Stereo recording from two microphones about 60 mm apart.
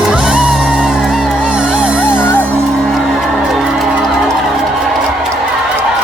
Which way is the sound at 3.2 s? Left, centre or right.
Centre.